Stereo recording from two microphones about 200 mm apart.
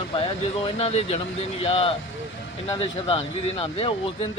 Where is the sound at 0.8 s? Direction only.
30° left (ahead or behind).